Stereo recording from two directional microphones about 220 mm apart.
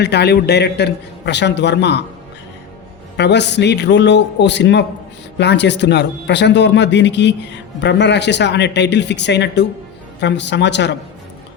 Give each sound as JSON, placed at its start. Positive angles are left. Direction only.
{"t": 0.0, "sound": "speech", "side_deg": 50}
{"t": 3.2, "sound": "speech", "side_deg": 50}